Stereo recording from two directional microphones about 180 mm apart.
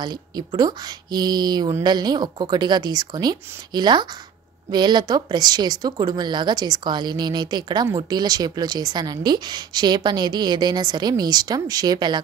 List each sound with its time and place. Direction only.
0.0 s speech: 25° right (ahead or behind)